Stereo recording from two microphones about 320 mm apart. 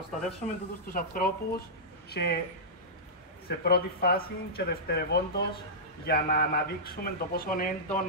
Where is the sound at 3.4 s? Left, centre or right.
Left.